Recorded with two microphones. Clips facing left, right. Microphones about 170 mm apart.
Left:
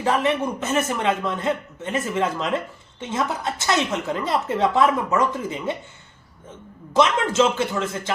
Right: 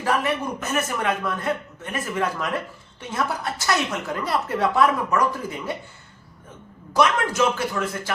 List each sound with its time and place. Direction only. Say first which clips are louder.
0.0 s a woman's voice: left 3 dB; 25° left (ahead or behind)
6.9 s a woman's voice: left 2 dB; 25° left (ahead or behind)